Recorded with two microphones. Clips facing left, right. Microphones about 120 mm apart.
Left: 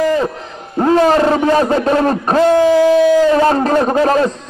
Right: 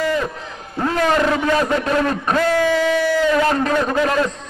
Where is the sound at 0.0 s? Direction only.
35° left (ahead or behind).